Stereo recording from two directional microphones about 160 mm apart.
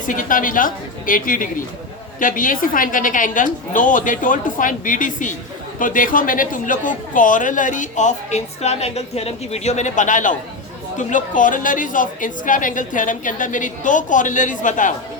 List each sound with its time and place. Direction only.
0.0 s a woman's voice: 55° left (ahead or behind)